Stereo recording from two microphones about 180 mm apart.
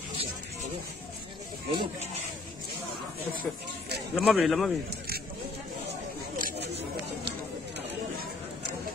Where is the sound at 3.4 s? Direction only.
65° right (ahead or behind).